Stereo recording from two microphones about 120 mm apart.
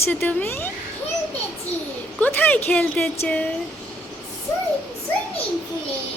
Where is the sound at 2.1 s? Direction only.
15° left (ahead or behind).